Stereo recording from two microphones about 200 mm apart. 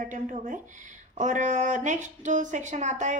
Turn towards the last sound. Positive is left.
turn(degrees=-35)  # may be behind; listen again after turning